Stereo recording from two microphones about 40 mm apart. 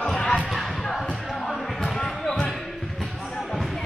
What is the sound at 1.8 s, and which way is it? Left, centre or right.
Basketball bounce, centre.